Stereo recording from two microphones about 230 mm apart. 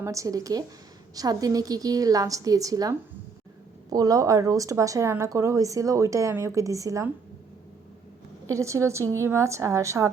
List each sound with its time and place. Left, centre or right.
0.0 s speech: centre
8.4 s speech: centre